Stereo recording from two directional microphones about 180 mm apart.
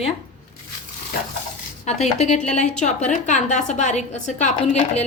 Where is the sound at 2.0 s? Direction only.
40° left (ahead or behind).